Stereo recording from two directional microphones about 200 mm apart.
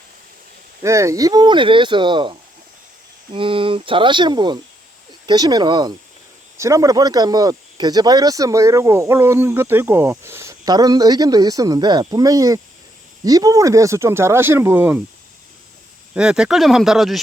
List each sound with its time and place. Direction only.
0.8 s speech: 15° right (ahead or behind)
3.3 s speech: 25° right (ahead or behind); by 15.0 s 10° right (ahead or behind)
16.1 s speech: 5° right (ahead or behind)